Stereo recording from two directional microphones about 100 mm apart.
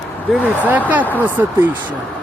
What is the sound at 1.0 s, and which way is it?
Speech, 20° left (ahead or behind).